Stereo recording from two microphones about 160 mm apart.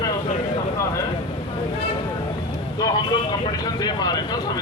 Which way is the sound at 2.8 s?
25° left (ahead or behind).